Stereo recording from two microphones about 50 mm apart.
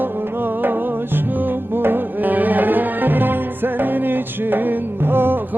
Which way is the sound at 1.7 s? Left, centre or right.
Right.